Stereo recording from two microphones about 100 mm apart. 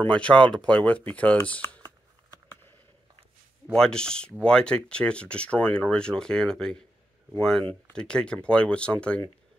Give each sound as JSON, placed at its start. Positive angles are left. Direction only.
{"t": 0.0, "sound": "speech", "side_deg": 10}
{"t": 3.7, "sound": "speech", "side_deg": 5}